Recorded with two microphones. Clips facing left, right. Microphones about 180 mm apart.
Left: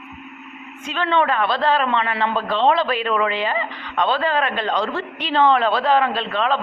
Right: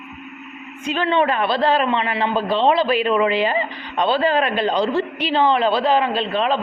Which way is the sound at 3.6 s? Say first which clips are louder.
Right 1 dB; 30° right (ahead or behind).